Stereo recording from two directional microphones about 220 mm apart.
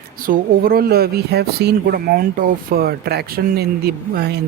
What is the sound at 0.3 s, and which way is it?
Speech, 40° right (ahead or behind).